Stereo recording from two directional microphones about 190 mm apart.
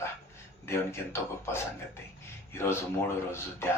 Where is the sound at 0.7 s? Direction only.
15° left (ahead or behind).